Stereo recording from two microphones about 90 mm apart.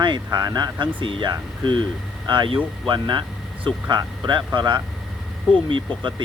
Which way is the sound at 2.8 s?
60° right (ahead or behind).